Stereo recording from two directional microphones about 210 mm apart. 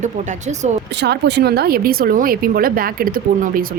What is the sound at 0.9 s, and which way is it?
Speech, 55° right (ahead or behind).